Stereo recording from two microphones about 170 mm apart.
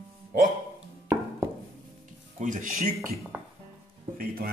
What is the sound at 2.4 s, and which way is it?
Speech, 50° right (ahead or behind).